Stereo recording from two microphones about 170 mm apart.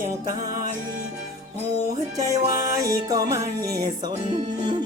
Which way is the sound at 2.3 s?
20° right (ahead or behind).